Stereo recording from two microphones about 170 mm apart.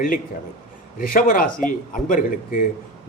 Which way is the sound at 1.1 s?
55° left (ahead or behind).